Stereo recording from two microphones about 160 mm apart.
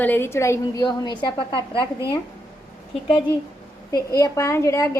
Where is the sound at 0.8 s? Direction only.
25° left (ahead or behind).